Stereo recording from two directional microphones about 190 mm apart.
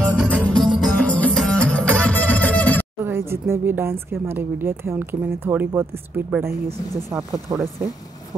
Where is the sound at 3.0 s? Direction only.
10° right (ahead or behind).